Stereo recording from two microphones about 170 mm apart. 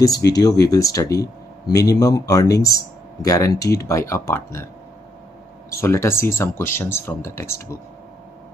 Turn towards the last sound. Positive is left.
turn(degrees=15)  # may be behind; listen again after turning